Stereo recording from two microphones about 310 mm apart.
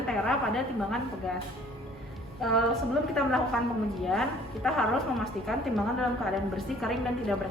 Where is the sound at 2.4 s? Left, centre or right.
Centre.